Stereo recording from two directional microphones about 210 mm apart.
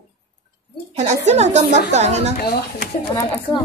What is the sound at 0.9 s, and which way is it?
A woman's voice, 35° right (ahead or behind).